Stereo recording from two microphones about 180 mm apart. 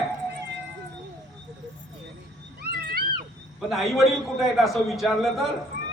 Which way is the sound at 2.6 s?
60° right (ahead or behind).